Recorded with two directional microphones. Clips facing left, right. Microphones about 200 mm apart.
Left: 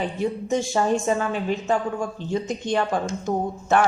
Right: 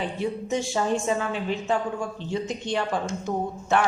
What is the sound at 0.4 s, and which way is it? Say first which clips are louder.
A woman's voice: left 4 dB; 45° left (ahead or behind).